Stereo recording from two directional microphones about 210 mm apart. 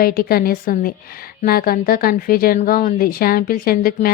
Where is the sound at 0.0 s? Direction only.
45° left (ahead or behind).